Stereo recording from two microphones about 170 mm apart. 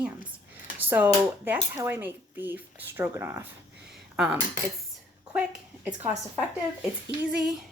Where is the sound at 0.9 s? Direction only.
10° right (ahead or behind).